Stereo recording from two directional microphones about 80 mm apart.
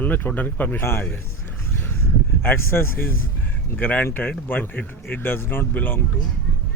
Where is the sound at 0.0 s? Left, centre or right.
Left.